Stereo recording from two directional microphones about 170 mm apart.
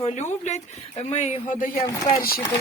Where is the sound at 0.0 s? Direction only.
40° left (ahead or behind).